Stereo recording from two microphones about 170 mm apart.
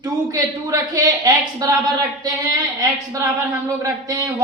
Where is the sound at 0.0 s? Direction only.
20° right (ahead or behind).